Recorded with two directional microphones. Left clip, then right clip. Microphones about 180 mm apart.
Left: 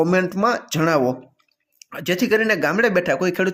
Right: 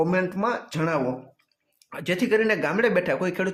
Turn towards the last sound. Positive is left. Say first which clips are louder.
# left 5 dB
turn(degrees=20)  # may be behind; listen again after turning